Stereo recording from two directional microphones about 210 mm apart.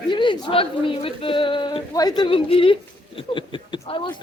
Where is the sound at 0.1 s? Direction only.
20° left (ahead or behind).